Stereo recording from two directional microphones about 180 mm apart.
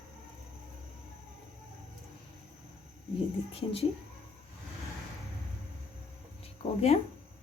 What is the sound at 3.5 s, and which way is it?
Speech, 35° left (ahead or behind).